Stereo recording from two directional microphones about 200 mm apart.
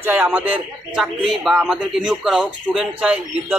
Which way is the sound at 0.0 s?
10° right (ahead or behind).